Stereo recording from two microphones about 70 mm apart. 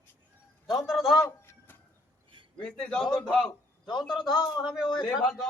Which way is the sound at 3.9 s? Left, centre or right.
Left.